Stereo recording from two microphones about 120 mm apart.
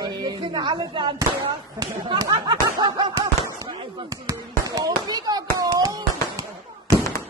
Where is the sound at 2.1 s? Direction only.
35° right (ahead or behind).